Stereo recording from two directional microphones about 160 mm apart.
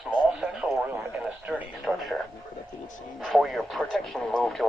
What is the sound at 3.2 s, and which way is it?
Speech, centre (ahead or behind).